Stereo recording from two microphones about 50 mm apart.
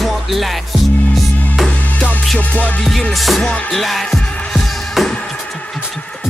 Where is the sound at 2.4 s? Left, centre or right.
Left.